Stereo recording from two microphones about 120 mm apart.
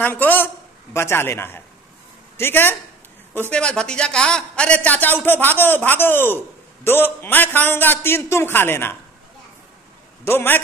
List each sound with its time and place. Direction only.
0.0 s a man's voice: 15° left (ahead or behind)
10.2 s a man's voice: 15° left (ahead or behind)